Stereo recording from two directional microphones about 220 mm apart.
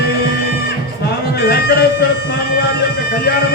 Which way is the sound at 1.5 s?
45° left (ahead or behind).